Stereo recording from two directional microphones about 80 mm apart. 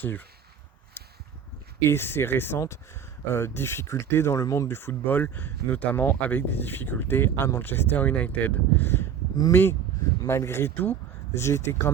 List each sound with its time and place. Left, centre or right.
0.0 s speech: left
1.8 s speech: left
4.4 s speech: left
4.7 s speech: left